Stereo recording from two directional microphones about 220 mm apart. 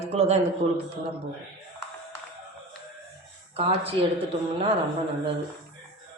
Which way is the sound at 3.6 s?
25° right (ahead or behind).